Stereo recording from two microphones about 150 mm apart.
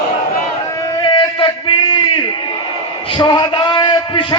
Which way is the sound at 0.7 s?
20° left (ahead or behind).